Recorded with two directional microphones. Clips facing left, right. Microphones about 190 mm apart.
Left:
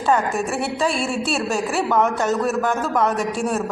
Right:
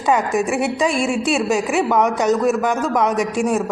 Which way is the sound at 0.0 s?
15° right (ahead or behind).